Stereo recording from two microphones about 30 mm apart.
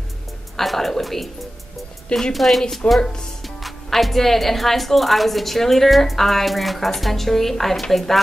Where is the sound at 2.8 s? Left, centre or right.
Left.